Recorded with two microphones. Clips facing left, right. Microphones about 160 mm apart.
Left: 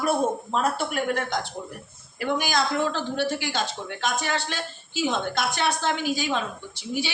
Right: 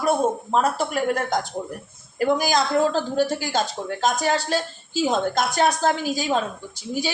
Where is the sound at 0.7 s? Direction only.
40° right (ahead or behind).